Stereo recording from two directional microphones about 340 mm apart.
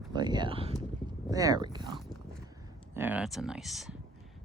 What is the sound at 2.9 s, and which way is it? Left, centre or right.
Speech, centre.